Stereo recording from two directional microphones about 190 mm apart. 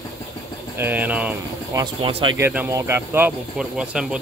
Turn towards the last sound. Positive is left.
turn(degrees=-5)  # may be behind; listen again after turning